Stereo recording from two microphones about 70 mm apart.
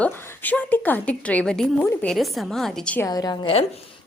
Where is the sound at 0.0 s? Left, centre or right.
Left.